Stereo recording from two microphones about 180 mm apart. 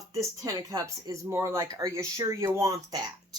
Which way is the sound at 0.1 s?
15° right (ahead or behind).